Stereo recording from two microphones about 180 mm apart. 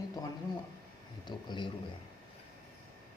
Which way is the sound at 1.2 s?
25° left (ahead or behind).